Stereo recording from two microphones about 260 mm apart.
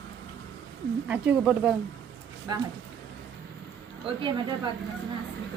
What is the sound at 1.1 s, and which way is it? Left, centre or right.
Speech, centre.